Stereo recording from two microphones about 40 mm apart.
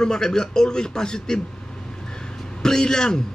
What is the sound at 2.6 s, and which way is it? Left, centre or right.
Speech, centre.